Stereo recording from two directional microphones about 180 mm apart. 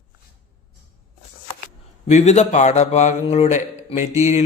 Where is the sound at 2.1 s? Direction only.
40° left (ahead or behind).